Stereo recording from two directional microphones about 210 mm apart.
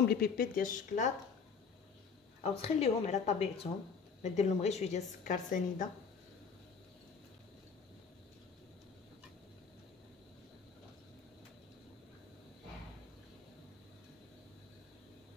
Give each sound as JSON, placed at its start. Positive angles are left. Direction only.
{"t": 0.0, "sound": "a woman's voice", "side_deg": 45}
{"t": 2.6, "sound": "a woman's voice", "side_deg": 30}